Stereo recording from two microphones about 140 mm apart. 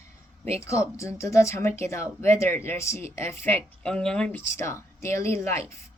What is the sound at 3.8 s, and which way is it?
Speech, 5° left (ahead or behind).